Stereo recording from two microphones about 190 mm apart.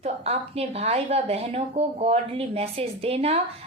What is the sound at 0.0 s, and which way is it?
Speech, 35° right (ahead or behind).